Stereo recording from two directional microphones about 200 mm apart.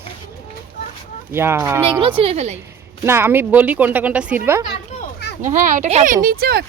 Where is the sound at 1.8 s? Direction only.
25° right (ahead or behind).